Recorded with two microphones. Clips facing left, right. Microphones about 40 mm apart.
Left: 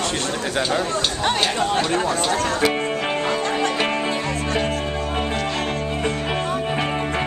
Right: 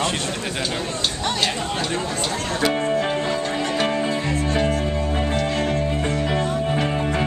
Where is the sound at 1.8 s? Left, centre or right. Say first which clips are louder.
Left 4 dB; left.